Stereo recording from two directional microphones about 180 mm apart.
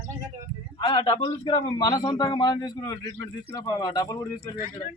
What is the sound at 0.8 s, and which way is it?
A man's voice, 25° left (ahead or behind).